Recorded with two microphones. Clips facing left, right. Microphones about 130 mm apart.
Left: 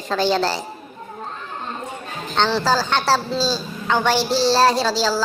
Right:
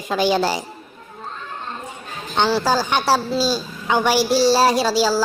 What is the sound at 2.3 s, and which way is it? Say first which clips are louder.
A woman's voice: right 1 dB; 10° right (ahead or behind).